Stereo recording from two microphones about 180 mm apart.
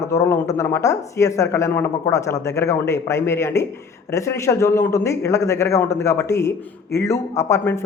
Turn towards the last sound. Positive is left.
turn(degrees=15)  # may be behind; listen again after turning